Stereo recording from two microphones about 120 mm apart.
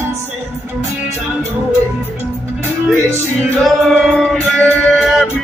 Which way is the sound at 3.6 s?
Centre (ahead or behind).